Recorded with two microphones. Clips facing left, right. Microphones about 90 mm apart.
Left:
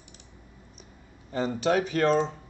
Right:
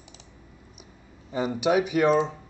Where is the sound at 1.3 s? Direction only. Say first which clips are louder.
Right 2 dB; 10° right (ahead or behind).